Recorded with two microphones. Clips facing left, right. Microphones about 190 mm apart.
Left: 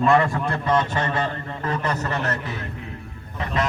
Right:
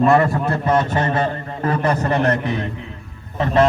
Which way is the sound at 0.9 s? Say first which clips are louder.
Right 5 dB; 25° right (ahead or behind).